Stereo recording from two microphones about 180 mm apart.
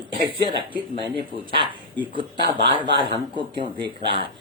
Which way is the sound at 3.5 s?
30° right (ahead or behind).